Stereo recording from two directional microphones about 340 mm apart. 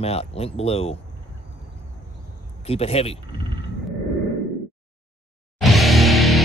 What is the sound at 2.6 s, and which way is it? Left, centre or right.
Speech, centre.